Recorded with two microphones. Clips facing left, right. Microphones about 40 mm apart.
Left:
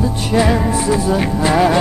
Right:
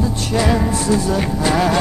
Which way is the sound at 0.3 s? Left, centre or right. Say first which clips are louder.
Left 3 dB; centre.